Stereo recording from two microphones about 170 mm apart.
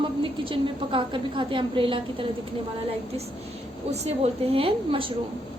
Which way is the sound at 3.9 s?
40° right (ahead or behind).